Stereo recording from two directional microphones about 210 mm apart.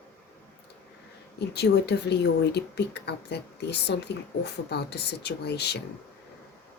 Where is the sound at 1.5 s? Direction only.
50° left (ahead or behind).